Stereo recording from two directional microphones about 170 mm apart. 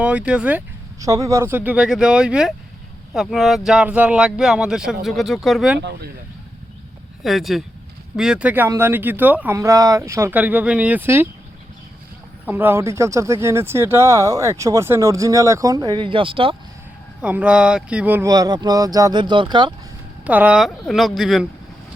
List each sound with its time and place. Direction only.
0.0 s speech: 5° right (ahead or behind)
0.9 s speech: 20° right (ahead or behind); by 5.8 s centre (ahead or behind)
7.3 s speech: centre (ahead or behind)
12.5 s speech: 10° right (ahead or behind); by 16.6 s 30° right (ahead or behind)
17.2 s speech: 5° right (ahead or behind)
18.3 s speech: 20° right (ahead or behind)
20.2 s speech: 10° right (ahead or behind)